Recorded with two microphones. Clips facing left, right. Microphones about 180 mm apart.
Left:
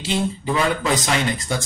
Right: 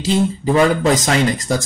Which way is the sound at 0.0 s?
40° right (ahead or behind).